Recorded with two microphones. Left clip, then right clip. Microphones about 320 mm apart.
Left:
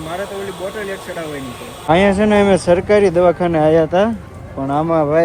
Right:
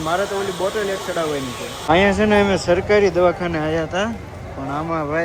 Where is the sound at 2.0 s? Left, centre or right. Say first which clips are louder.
Left 3 dB; centre.